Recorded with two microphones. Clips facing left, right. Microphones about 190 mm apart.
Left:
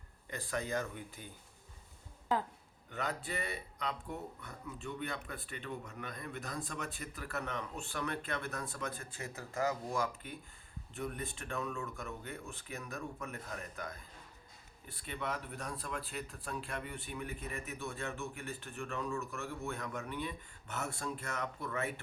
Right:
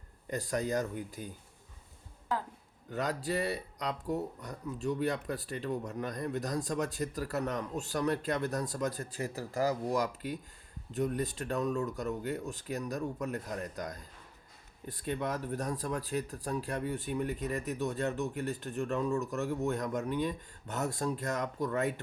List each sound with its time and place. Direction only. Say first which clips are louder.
0.3 s speech: right 6 dB; 40° right (ahead or behind)
2.9 s speech: right 6 dB; 40° right (ahead or behind)